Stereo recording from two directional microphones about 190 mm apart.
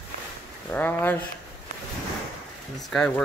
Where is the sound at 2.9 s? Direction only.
5° left (ahead or behind).